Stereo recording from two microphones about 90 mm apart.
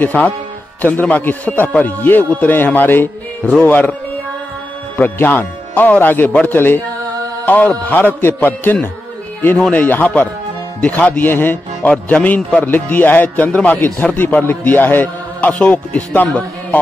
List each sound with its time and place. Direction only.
0.0 s a man's voice: 15° left (ahead or behind)
4.9 s a man's voice: 20° left (ahead or behind)